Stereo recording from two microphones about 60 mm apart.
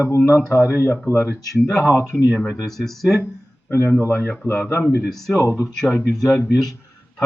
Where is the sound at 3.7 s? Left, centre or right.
Left.